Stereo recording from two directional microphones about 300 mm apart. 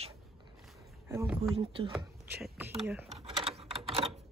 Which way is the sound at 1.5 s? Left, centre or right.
Centre.